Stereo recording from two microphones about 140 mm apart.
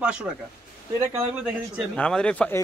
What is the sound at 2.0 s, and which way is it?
Speech, 5° left (ahead or behind).